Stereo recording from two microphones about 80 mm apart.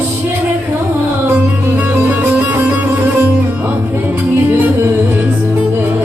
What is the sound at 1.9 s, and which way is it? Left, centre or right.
Music, right.